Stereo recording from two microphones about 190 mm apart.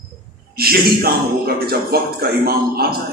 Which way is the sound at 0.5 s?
55° right (ahead or behind).